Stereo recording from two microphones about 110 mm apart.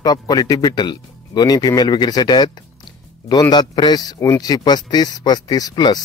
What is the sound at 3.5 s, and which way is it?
Speech, 40° left (ahead or behind).